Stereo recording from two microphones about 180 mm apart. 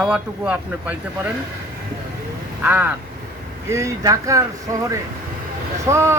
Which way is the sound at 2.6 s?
10° right (ahead or behind).